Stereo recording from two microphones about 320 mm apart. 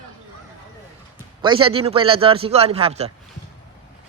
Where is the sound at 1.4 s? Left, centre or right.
Centre.